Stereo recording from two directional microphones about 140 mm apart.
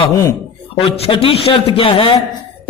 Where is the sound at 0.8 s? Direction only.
45° left (ahead or behind).